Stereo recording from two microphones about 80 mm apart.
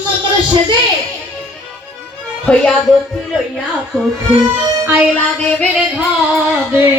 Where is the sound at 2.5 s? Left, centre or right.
Centre.